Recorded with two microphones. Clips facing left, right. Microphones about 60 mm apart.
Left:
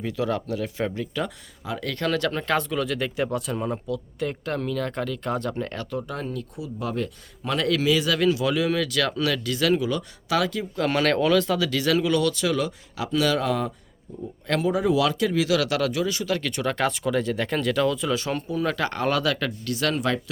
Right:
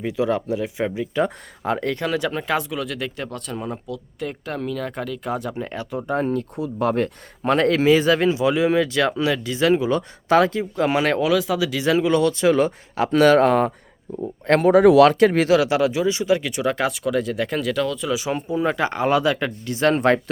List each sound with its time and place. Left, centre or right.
0.0 s speech: centre
1.6 s speech: right
2.0 s speech: centre
6.1 s speech: right
10.2 s speech: right
10.6 s speech: centre; by 14.7 s right
14.7 s speech: right
15.5 s speech: right
18.4 s speech: right